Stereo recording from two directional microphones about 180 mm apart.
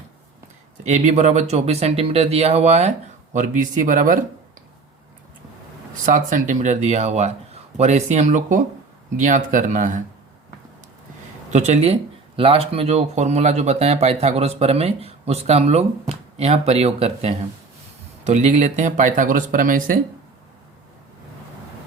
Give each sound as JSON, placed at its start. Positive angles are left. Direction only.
{"t": 0.9, "sound": "speech", "side_deg": -40}
{"t": 6.1, "sound": "speech", "side_deg": -45}
{"t": 11.5, "sound": "speech", "side_deg": -40}